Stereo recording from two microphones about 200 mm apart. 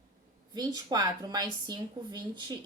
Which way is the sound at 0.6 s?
20° right (ahead or behind).